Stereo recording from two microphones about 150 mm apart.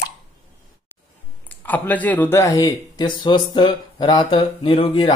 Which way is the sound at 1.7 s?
10° left (ahead or behind).